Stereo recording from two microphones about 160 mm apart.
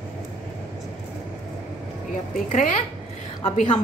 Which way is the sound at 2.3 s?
55° left (ahead or behind).